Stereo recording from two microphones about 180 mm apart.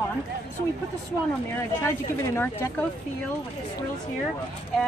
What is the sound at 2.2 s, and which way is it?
Speech, 15° left (ahead or behind).